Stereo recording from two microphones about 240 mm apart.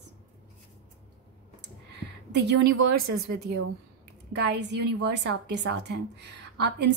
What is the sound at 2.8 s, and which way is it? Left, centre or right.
Speech, right.